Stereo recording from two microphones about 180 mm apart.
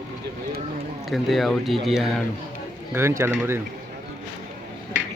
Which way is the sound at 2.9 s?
15° right (ahead or behind).